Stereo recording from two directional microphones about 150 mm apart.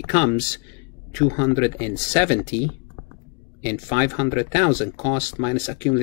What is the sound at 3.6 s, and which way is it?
Speech, 35° left (ahead or behind).